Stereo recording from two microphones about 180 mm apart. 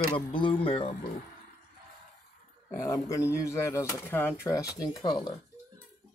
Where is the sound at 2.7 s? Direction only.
15° left (ahead or behind).